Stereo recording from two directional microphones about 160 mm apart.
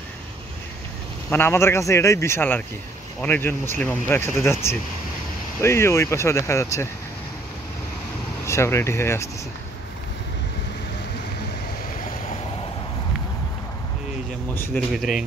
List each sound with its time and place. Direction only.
1.3 s speech: 15° left (ahead or behind)
8.5 s speech: 15° left (ahead or behind)
14.7 s speech: centre (ahead or behind)